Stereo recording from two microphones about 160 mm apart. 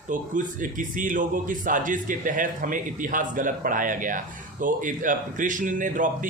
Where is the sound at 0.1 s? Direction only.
55° right (ahead or behind).